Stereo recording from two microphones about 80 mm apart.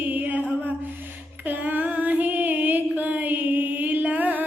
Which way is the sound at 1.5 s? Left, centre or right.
Right.